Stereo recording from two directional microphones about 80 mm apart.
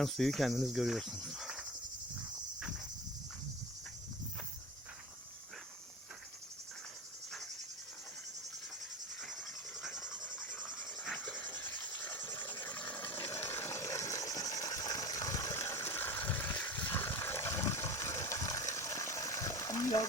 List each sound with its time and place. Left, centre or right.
0.0 s speech: centre
2.6 s cricket: centre
10.0 s cricket: centre
10.2 s wild animals: centre
11.1 s cricket: centre
12.9 s a sound: left
13.1 s a sound: left